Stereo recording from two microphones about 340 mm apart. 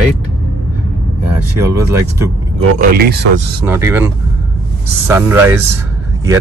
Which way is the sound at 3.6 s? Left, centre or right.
Centre.